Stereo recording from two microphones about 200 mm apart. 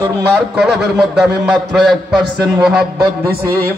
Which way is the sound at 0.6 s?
Centre (ahead or behind).